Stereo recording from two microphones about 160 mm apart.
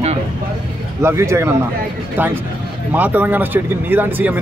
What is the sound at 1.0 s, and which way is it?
Speech, 15° right (ahead or behind).